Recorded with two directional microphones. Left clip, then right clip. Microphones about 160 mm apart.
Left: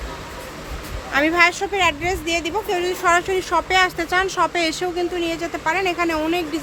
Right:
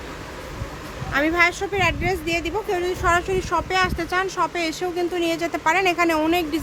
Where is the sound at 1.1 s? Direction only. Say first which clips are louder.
Left 3 dB; 5° left (ahead or behind).